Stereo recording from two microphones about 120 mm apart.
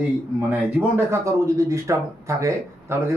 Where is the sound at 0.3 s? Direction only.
20° right (ahead or behind).